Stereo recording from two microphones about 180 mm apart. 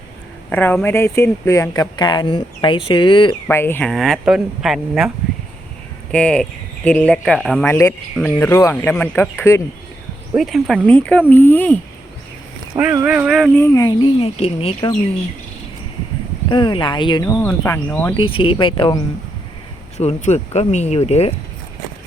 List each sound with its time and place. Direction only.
0.5 s speech: 10° left (ahead or behind); by 3.3 s 30° left (ahead or behind)
3.4 s speech: 10° left (ahead or behind)
7.7 s speech: 10° left (ahead or behind)
10.3 s speech: centre (ahead or behind)
12.8 s speech: 10° right (ahead or behind)
13.6 s speech: 20° left (ahead or behind)
16.5 s speech: 25° left (ahead or behind)
17.4 s speech: 10° left (ahead or behind)
18.2 s speech: 30° left (ahead or behind)
20.0 s speech: 40° left (ahead or behind)